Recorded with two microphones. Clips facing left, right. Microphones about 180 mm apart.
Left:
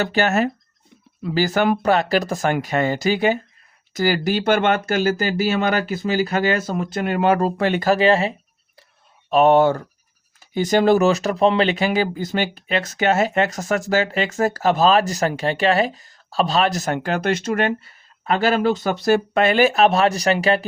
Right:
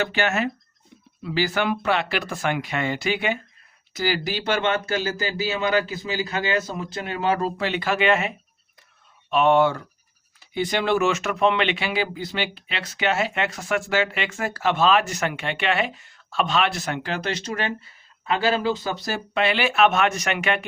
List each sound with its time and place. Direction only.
0.0 s speech: 40° left (ahead or behind)